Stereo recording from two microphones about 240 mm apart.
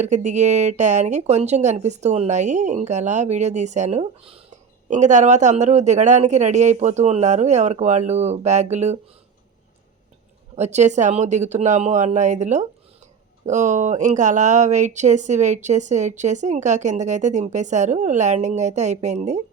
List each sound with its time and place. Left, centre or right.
0.3 s speech: right
10.5 s speech: right